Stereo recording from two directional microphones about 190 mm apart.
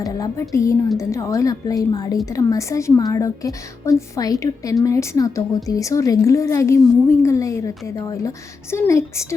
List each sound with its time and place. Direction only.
0.0 s a woman's voice: 15° left (ahead or behind)